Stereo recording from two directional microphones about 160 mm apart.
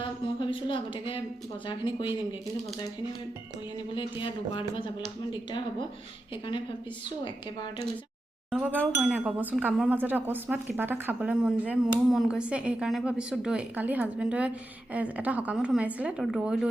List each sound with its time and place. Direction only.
0.0 s a sound: 30° left (ahead or behind)
1.6 s speech: 30° left (ahead or behind)
3.9 s speech: 30° left (ahead or behind)
8.4 s speech: 10° right (ahead or behind)